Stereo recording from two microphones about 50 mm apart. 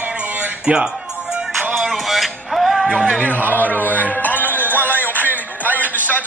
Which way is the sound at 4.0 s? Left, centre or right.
Left.